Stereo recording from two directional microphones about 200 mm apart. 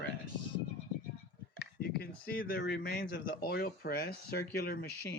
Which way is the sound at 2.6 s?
55° left (ahead or behind).